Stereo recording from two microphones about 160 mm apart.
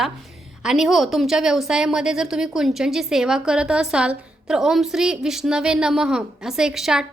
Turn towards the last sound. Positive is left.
turn(degrees=-5)  # may be behind; listen again after turning